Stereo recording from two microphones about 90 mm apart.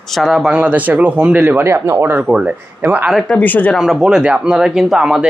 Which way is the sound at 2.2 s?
10° right (ahead or behind).